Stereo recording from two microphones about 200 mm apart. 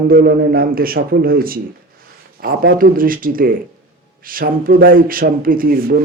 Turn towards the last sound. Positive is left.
turn(degrees=-50)  # may be behind; listen again after turning